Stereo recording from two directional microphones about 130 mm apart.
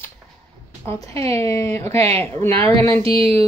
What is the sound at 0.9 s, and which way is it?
Speech, 25° left (ahead or behind).